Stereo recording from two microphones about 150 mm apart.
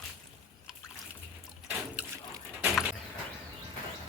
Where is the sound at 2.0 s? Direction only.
20° right (ahead or behind).